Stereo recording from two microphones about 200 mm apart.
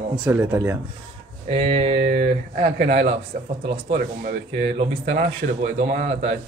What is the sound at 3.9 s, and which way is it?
Speech, 45° right (ahead or behind).